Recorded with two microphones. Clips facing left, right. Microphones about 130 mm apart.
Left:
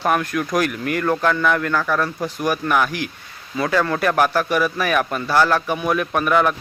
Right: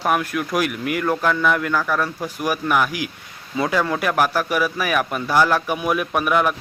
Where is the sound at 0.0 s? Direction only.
5° right (ahead or behind).